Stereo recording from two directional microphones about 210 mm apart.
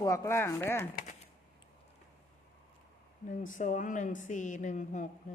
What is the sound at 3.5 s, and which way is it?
A woman's voice, 35° left (ahead or behind).